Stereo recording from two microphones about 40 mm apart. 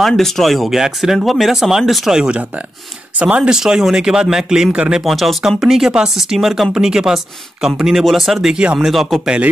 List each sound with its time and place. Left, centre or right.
0.0 s speech: centre
2.0 s speech: centre
3.2 s speech: right
3.4 s speech: centre
4.7 s speech: right
5.0 s speech: centre
8.0 s speech: centre